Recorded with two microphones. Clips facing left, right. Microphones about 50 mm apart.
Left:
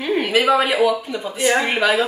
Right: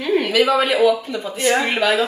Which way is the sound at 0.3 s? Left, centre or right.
Centre.